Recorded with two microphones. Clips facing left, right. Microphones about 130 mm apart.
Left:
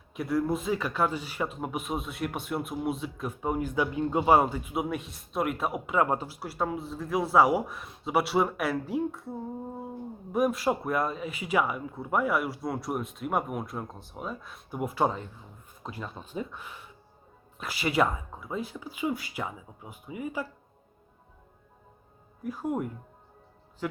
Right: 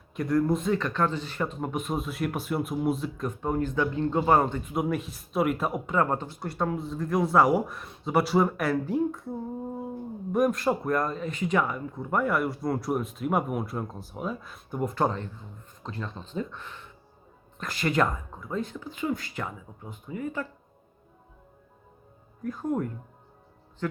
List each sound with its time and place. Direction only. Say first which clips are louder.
0.1 s speech: right 3 dB; 5° left (ahead or behind)
10.3 s speech: right 2 dB; 5° left (ahead or behind)
22.4 s speech: right 2 dB; 10° left (ahead or behind)